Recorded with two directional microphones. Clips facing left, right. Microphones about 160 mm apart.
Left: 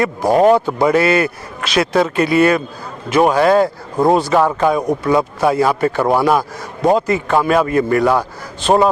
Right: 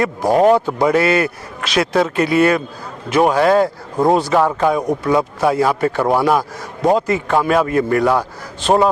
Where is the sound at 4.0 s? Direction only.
30° left (ahead or behind).